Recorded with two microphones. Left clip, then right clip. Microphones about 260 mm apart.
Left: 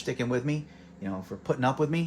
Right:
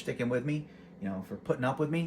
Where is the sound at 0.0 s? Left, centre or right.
Left.